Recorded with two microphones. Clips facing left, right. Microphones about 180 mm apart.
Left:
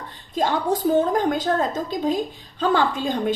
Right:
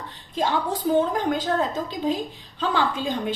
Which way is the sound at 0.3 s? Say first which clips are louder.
Left 3 dB; 45° left (ahead or behind).